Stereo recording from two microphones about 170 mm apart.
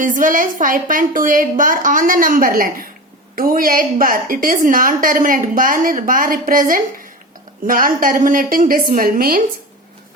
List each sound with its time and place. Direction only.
0.0 s a woman's voice: 50° right (ahead or behind)